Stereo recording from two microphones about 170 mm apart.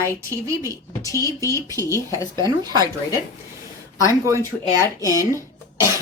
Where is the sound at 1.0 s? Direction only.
20° left (ahead or behind).